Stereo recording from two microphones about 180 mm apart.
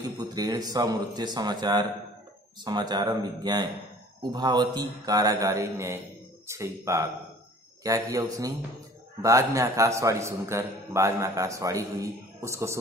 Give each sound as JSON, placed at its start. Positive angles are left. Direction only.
{"t": 0.2, "sound": "a man's voice", "side_deg": -20}